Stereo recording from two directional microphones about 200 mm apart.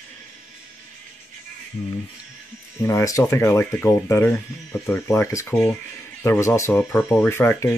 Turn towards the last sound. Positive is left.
turn(degrees=10)  # may be behind; listen again after turning